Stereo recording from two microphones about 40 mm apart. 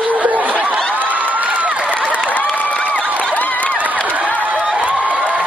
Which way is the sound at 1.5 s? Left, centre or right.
Right.